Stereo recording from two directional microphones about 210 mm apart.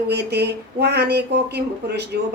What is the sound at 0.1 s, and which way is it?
A woman's voice, 50° right (ahead or behind).